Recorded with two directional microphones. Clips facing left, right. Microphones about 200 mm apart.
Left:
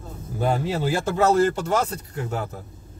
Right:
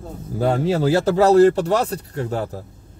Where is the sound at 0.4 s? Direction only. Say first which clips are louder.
Right 5 dB; 35° right (ahead or behind).